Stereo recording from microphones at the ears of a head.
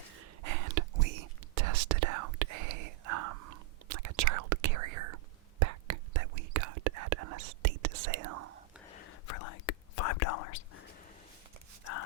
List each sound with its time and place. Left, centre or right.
0.2 s whispering: right
8.9 s whispering: left